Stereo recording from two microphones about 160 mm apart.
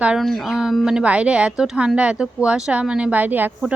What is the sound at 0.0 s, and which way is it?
A woman's voice, 5° right (ahead or behind).